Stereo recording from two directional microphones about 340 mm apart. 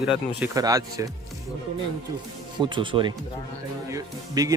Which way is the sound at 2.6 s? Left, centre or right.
Centre.